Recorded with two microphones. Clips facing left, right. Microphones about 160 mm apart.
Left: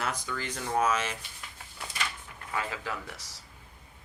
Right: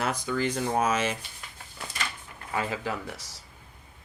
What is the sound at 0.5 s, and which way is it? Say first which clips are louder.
Speech: left 2 dB; 25° right (ahead or behind).